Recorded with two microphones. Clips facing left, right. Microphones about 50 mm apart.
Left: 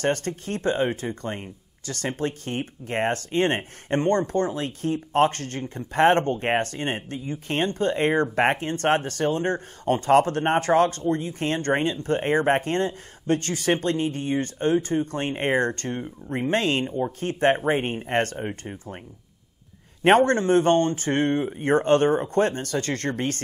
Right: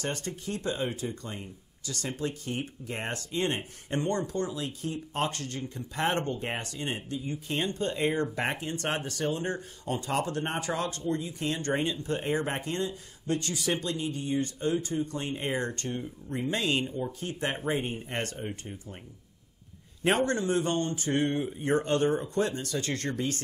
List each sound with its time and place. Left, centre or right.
0.0 s speech: left
20.0 s speech: left